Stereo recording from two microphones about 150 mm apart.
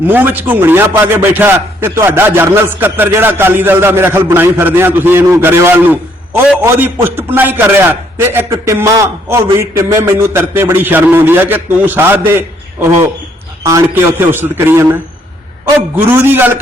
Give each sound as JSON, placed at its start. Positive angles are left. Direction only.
{"t": 0.1, "sound": "a man's voice", "side_deg": -10}
{"t": 13.7, "sound": "a man's voice", "side_deg": -20}
{"t": 16.0, "sound": "a man's voice", "side_deg": -15}